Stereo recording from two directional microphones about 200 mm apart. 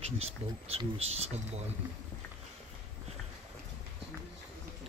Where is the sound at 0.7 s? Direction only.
30° right (ahead or behind).